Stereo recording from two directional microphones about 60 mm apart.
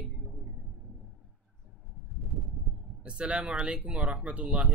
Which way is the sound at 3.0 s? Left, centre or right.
Centre.